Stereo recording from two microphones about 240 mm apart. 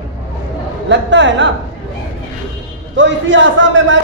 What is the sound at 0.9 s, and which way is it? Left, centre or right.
Speech, right.